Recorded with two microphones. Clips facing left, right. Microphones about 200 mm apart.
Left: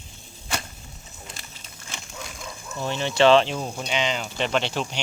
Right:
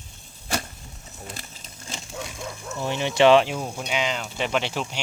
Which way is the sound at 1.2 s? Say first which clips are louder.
Right 5 dB; 40° right (ahead or behind).